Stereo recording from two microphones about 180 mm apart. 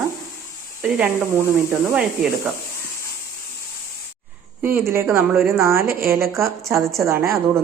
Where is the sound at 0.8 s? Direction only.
5° right (ahead or behind).